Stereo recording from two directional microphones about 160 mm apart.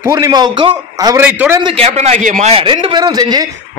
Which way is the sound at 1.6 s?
35° right (ahead or behind).